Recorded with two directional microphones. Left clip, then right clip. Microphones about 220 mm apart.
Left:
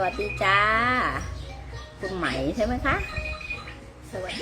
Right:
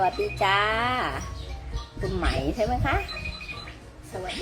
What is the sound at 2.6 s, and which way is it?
Speech, centre (ahead or behind).